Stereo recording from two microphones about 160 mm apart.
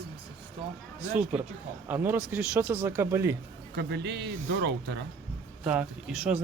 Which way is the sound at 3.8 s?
90° right.